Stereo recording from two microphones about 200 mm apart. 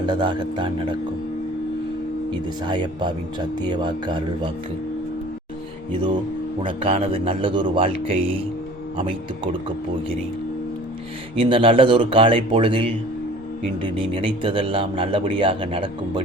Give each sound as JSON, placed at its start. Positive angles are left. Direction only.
{"t": 0.0, "sound": "a man's voice", "side_deg": -25}
{"t": 2.6, "sound": "a man's voice", "side_deg": -20}
{"t": 6.6, "sound": "a man's voice", "side_deg": -25}
{"t": 11.3, "sound": "a man's voice", "side_deg": -25}